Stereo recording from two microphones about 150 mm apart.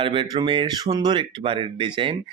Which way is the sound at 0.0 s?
35° right (ahead or behind).